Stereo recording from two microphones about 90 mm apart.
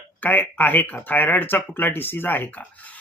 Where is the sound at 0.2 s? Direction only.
20° left (ahead or behind).